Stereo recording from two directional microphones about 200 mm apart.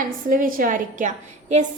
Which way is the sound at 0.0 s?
45° right (ahead or behind).